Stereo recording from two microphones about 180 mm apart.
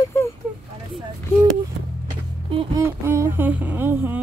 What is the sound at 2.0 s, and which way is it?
Music, 25° right (ahead or behind).